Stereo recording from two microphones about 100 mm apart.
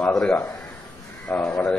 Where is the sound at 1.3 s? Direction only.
15° left (ahead or behind).